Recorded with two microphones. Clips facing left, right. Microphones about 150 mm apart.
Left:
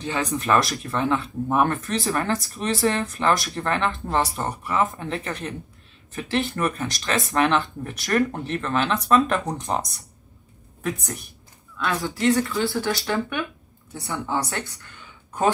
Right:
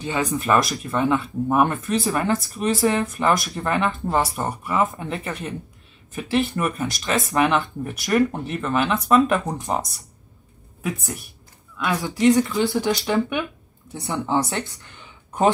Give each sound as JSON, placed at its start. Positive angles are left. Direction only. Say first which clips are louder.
{"t": 0.0, "sound": "speech", "louder": "right 2 dB", "side_deg": -5}
{"t": 11.8, "sound": "a woman's voice", "louder": "right 4 dB", "side_deg": -15}